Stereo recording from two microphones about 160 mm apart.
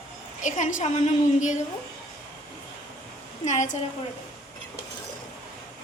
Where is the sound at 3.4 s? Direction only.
50° left (ahead or behind).